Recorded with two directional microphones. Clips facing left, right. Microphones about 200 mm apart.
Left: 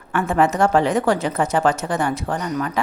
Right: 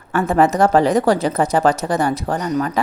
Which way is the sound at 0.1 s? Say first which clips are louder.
Right 3 dB; 40° right (ahead or behind).